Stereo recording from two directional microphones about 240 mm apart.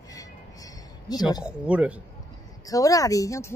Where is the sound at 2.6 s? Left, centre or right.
Centre.